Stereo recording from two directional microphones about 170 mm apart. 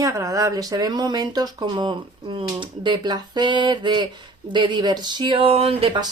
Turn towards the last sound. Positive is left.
turn(degrees=-30)  # may be behind; listen again after turning